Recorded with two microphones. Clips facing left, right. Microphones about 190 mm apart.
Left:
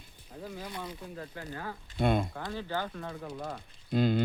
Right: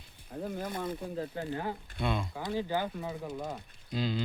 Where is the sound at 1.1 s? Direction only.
25° right (ahead or behind).